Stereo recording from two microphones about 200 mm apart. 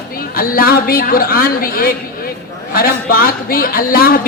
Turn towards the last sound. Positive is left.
turn(degrees=45)  # may be behind; listen again after turning